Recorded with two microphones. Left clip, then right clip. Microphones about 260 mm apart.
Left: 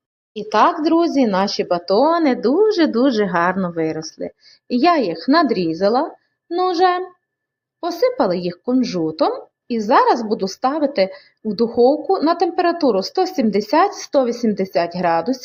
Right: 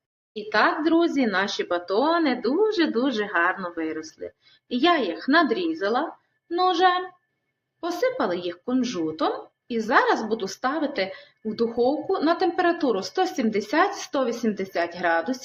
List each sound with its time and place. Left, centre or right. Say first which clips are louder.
0.3 s speech: left 6 dB; left
1.6 s speech: left 8 dB; centre
2.0 s a woman's voice: left 6 dB; left
11.8 s speech: left 10 dB; centre
12.2 s speech: left 1 dB; left